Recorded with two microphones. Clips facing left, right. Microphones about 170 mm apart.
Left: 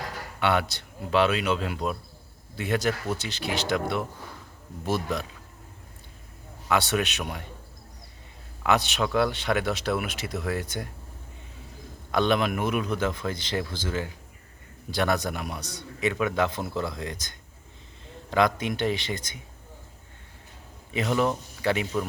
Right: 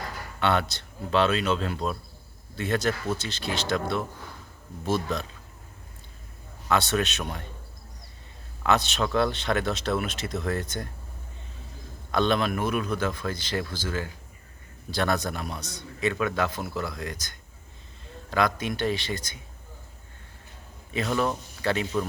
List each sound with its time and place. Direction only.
0.3 s a man's voice: 10° left (ahead or behind)
6.7 s a man's voice: 15° left (ahead or behind)
8.6 s a man's voice: 15° left (ahead or behind)
12.1 s a man's voice: 15° left (ahead or behind)
20.9 s a man's voice: 15° left (ahead or behind)